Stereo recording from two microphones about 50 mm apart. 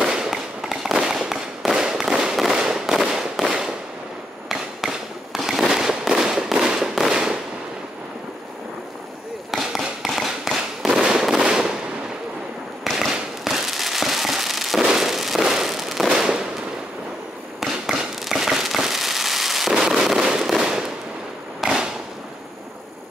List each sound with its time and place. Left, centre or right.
0.0 s fireworks: centre
9.5 s fireworks: centre
13.1 s fireworks: centre
17.6 s fireworks: centre
21.6 s firecracker: centre